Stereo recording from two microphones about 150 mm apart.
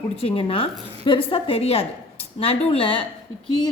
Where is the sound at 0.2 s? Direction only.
40° left (ahead or behind).